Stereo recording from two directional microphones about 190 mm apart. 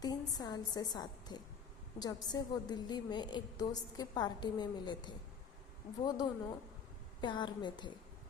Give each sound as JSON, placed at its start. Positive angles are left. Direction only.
{"t": 0.0, "sound": "a woman's voice", "side_deg": 20}